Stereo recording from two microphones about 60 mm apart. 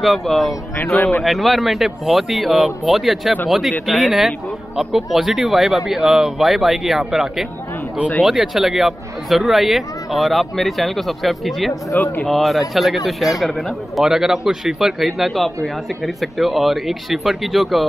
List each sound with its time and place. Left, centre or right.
0.0 s speech: centre
12.0 s speech: left
12.3 s speech: centre